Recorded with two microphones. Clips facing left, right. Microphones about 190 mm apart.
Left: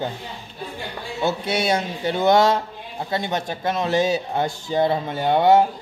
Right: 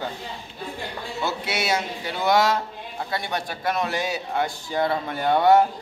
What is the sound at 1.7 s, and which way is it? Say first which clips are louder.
Speech: left 4 dB; 25° left (ahead or behind).